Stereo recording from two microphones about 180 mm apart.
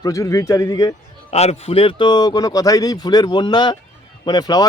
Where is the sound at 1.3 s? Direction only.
35° left (ahead or behind).